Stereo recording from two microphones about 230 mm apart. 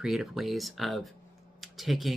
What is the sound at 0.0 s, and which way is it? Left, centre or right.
Speech, centre.